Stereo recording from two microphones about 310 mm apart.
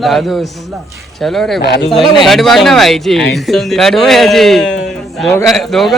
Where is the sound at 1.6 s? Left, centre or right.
Left.